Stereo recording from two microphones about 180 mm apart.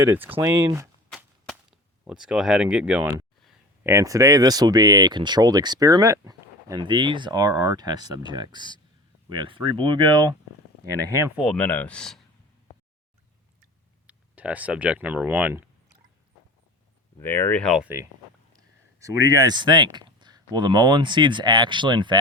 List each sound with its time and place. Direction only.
0.0 s speech: 10° right (ahead or behind)
2.0 s speech: 5° right (ahead or behind); by 10.3 s 25° right (ahead or behind)
10.8 s speech: 65° right (ahead or behind)
11.3 s speech: 5° left (ahead or behind)
14.1 s speech: 10° right (ahead or behind)
17.2 s speech: 10° left (ahead or behind)
17.8 s speech: 15° right (ahead or behind)